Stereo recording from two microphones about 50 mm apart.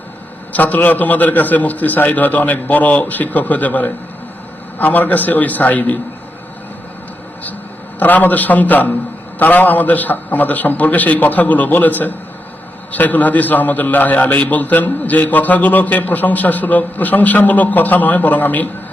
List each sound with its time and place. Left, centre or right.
0.5 s a man's voice: left
7.9 s a man's voice: left